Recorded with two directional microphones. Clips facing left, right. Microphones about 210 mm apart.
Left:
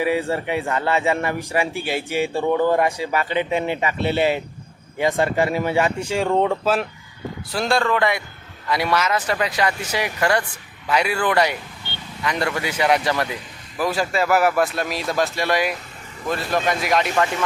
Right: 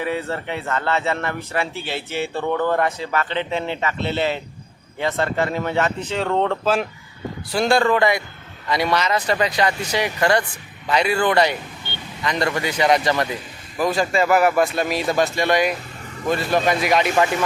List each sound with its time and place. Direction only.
0.0 s a man's voice: 10° left (ahead or behind)
11.9 s vehicle: 15° right (ahead or behind)
12.2 s a man's voice: 10° left (ahead or behind)